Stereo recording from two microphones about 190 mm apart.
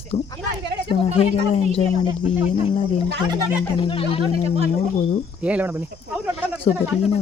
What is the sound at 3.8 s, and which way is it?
Speech, 30° left (ahead or behind).